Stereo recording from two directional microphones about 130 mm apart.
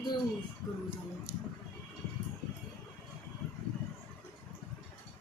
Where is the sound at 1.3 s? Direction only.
25° left (ahead or behind).